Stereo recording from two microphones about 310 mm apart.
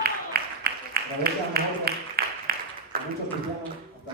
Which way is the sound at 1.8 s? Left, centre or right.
Right.